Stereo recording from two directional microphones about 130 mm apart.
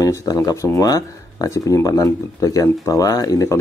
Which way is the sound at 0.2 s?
25° left (ahead or behind).